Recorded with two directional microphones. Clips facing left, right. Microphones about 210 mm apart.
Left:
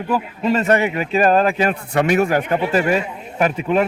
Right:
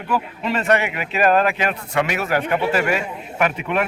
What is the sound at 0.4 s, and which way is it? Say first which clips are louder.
A man's voice: left 4 dB; 35° left (ahead or behind).